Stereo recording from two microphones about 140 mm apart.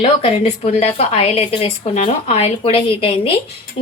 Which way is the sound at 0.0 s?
45° left (ahead or behind).